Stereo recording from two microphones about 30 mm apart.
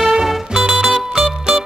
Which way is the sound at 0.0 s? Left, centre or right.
Centre.